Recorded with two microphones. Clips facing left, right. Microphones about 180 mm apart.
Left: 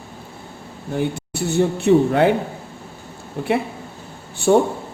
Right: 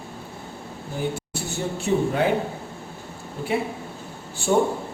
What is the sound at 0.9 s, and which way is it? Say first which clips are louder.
Speech: left 5 dB; 65° left (ahead or behind).